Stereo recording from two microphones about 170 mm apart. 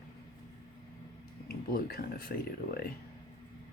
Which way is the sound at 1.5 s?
60° left (ahead or behind).